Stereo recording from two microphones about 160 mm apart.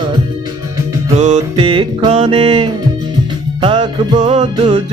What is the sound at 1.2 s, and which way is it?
Music, 40° right (ahead or behind).